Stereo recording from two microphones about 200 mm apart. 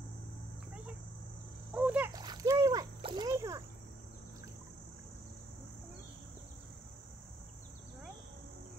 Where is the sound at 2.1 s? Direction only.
20° right (ahead or behind).